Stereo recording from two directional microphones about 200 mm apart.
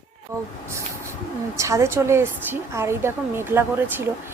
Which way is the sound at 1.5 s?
15° right (ahead or behind).